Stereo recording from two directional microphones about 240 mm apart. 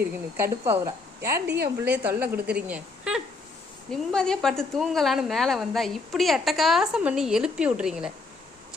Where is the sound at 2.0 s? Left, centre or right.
Centre.